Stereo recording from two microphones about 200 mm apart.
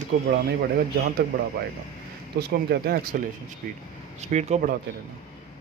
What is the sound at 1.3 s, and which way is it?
A man's voice, 45° right (ahead or behind).